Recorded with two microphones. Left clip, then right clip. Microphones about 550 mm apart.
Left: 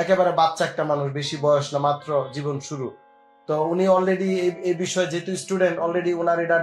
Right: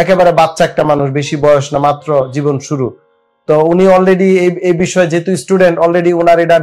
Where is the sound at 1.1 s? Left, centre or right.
Right.